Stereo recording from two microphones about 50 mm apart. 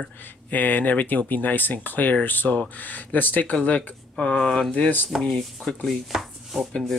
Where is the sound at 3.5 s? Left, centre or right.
Left.